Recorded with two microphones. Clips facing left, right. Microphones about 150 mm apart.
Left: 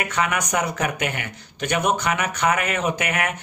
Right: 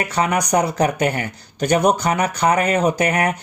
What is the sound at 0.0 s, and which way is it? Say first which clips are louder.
Speech: right 4 dB; 35° right (ahead or behind).